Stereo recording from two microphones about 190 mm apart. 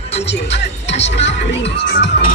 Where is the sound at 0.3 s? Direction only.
65° left (ahead or behind).